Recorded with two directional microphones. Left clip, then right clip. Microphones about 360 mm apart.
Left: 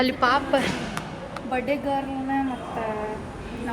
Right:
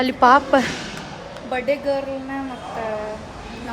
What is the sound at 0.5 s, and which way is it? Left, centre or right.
Speech, right.